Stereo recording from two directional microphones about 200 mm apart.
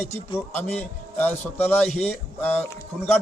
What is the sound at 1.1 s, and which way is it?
A man's voice, 10° left (ahead or behind).